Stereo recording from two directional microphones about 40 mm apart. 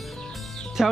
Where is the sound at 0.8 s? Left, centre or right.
Centre.